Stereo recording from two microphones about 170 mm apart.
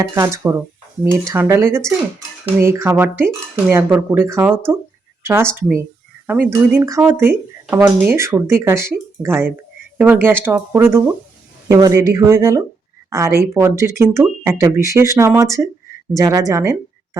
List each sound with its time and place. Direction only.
0.0 s a woman's voice: 20° right (ahead or behind)